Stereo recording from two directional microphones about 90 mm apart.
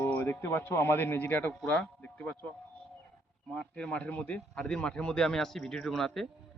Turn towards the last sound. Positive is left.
turn(degrees=5)  # may be behind; listen again after turning